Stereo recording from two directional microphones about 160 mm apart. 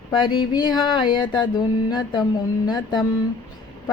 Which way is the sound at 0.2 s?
30° left (ahead or behind).